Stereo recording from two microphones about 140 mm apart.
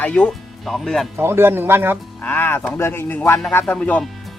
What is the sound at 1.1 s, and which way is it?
Speech, 15° right (ahead or behind).